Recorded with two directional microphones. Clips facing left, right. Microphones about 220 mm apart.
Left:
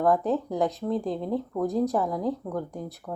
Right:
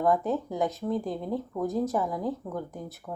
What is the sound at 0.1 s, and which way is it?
Speech, centre (ahead or behind).